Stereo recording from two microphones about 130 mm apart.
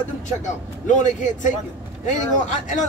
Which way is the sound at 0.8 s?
70° left (ahead or behind).